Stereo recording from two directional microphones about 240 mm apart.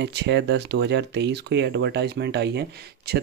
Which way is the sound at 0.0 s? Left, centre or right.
Right.